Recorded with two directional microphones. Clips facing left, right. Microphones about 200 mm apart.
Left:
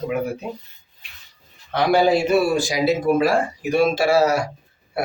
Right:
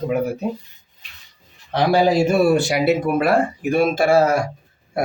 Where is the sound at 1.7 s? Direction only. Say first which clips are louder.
Right 1 dB; 35° right (ahead or behind).